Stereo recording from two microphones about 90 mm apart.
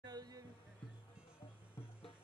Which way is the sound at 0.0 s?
45° right (ahead or behind).